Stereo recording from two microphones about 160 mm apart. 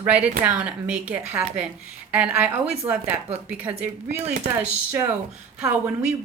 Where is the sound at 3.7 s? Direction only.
20° right (ahead or behind).